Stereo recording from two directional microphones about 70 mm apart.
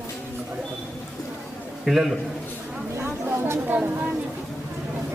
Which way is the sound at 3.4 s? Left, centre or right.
Right.